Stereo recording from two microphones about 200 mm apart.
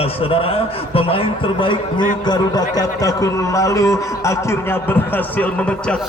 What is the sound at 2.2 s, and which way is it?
Speech, 20° left (ahead or behind).